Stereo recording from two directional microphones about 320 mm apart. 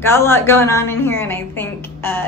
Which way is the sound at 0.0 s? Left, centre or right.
Centre.